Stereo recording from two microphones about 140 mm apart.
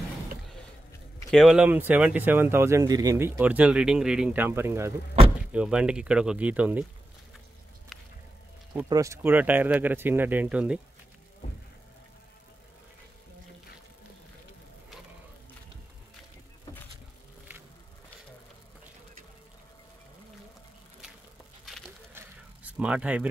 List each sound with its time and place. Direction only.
1.3 s speech: centre (ahead or behind); by 4.9 s 20° right (ahead or behind)
5.5 s speech: 5° right (ahead or behind)
8.8 s speech: 25° right (ahead or behind)
22.1 s a sound: 10° right (ahead or behind)